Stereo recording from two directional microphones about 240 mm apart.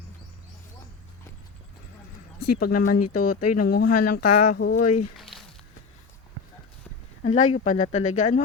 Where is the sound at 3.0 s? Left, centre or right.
Left.